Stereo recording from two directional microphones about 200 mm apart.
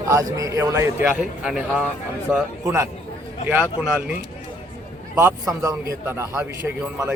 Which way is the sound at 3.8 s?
5° right (ahead or behind).